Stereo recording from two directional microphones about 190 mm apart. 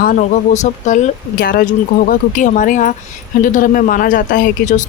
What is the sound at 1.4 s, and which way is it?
Speech, 50° left (ahead or behind).